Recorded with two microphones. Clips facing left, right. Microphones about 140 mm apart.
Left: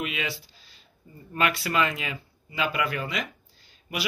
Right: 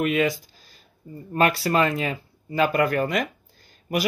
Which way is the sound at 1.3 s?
35° right (ahead or behind).